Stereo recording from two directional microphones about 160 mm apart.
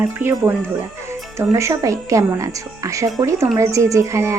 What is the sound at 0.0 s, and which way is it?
Speech, 15° right (ahead or behind).